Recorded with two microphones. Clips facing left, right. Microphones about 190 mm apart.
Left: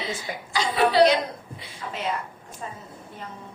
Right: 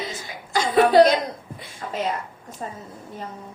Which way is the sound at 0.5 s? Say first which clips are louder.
Right 5 dB; 45° right (ahead or behind).